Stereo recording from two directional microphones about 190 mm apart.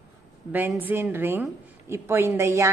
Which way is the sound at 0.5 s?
10° right (ahead or behind).